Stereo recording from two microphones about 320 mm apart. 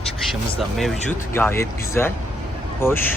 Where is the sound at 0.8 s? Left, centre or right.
Centre.